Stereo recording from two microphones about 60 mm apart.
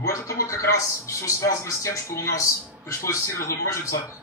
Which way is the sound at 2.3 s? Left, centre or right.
Left.